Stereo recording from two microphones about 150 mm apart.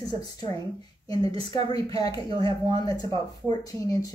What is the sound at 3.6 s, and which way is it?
Speech, 20° left (ahead or behind).